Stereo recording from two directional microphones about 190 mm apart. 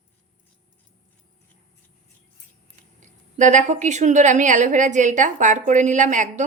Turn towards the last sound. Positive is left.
turn(degrees=-40)  # may be behind; listen again after turning